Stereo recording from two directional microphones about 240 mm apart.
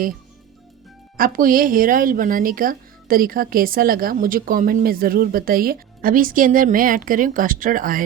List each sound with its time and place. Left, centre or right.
1.1 s speech: right